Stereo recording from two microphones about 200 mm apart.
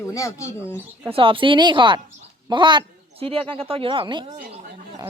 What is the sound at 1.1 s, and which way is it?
A man's voice, 25° right (ahead or behind).